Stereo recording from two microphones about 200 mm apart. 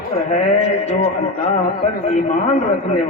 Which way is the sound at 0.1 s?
35° left (ahead or behind).